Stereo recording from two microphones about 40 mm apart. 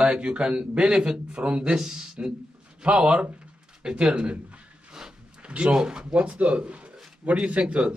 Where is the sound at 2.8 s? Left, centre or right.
Right.